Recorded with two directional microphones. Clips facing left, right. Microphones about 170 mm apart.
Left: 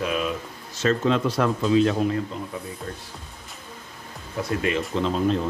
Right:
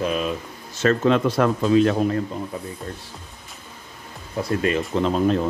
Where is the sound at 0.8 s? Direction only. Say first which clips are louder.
Right 3 dB; 60° right (ahead or behind).